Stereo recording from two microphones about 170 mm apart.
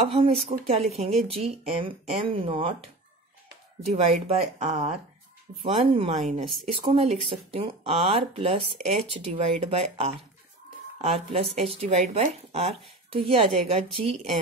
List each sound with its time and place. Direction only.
0.0 s speech: 35° right (ahead or behind)
3.9 s speech: 35° right (ahead or behind)